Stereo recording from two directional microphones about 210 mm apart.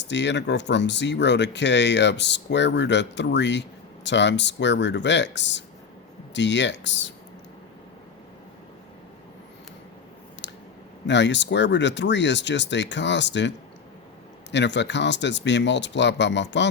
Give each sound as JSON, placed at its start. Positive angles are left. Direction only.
{"t": 0.0, "sound": "speech", "side_deg": 55}
{"t": 10.4, "sound": "clicking", "side_deg": 55}
{"t": 11.0, "sound": "speech", "side_deg": 55}
{"t": 14.5, "sound": "speech", "side_deg": 55}